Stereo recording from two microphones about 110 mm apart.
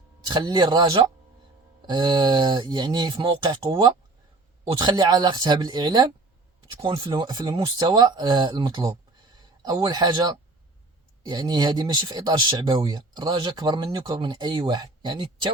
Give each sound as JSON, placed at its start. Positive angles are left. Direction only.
{"t": 0.3, "sound": "speech", "side_deg": -40}